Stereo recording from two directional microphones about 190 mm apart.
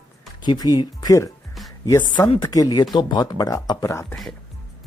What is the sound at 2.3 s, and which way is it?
Speech, 20° left (ahead or behind).